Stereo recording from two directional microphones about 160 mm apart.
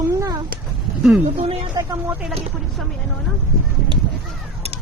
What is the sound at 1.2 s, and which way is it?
Speech, 40° right (ahead or behind).